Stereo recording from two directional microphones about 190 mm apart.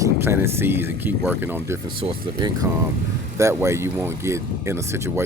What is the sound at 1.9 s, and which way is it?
Speech, 25° right (ahead or behind).